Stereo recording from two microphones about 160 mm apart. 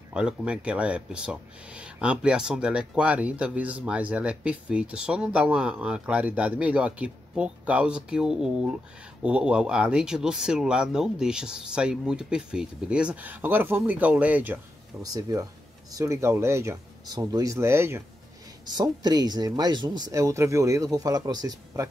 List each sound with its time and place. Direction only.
0.1 s speech: 5° right (ahead or behind)
15.0 s speech: 20° right (ahead or behind)